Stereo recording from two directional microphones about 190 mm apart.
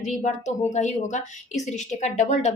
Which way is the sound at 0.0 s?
40° left (ahead or behind).